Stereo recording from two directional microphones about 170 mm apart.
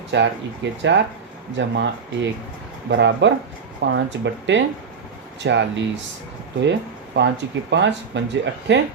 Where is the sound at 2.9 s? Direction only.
90° right.